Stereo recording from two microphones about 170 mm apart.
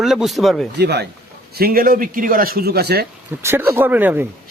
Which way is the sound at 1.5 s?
60° right (ahead or behind).